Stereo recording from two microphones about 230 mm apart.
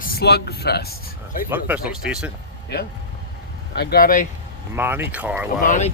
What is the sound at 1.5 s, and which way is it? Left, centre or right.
Speech, centre.